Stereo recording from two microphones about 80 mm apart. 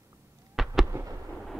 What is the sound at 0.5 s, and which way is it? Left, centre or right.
Fireworks, centre.